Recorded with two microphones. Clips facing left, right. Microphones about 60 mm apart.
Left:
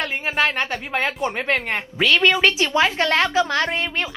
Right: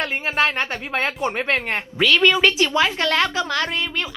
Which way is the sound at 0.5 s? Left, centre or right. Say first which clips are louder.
Left 1 dB; right.